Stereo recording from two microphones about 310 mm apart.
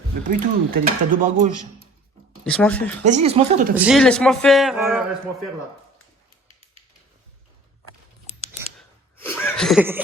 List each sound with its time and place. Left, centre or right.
0.3 s speech: right
2.4 s speech: centre
3.0 s speech: right
3.8 s speech: centre
6.5 s a sound: centre
9.1 s a sound: centre